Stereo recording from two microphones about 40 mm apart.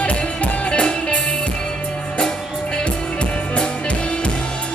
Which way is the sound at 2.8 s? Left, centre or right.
Left.